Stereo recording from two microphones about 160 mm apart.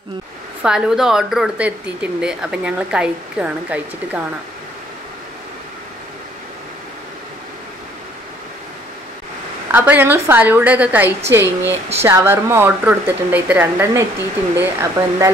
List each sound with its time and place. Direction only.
0.6 s speech: 5° right (ahead or behind)
9.7 s speech: 10° right (ahead or behind)